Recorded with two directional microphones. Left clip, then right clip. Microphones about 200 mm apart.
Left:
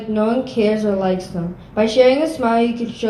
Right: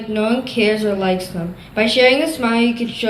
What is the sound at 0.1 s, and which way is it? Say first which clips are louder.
A woman's voice: even; 35° left (ahead or behind).